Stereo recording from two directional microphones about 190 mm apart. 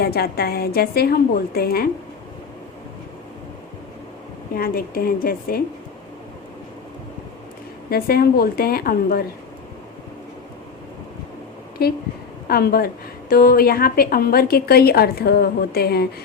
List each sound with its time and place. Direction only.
0.0 s a woman's voice: 55° left (ahead or behind)
4.5 s a woman's voice: 50° left (ahead or behind)
7.9 s a woman's voice: 55° left (ahead or behind)
11.8 s a woman's voice: 55° left (ahead or behind)